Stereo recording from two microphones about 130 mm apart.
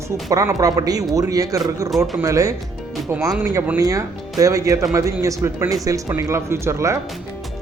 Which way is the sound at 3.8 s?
25° right (ahead or behind).